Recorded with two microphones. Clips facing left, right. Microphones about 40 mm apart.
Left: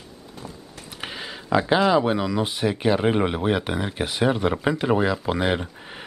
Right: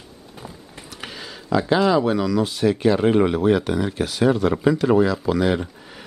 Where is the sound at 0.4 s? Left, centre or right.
Centre.